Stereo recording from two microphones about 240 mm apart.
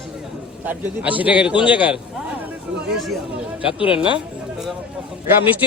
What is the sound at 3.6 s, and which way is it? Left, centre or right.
Speech, left.